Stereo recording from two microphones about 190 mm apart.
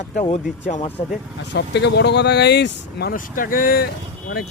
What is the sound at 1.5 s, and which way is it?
Speech, 65° left (ahead or behind).